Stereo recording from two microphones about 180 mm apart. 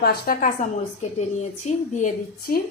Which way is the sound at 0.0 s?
55° left (ahead or behind).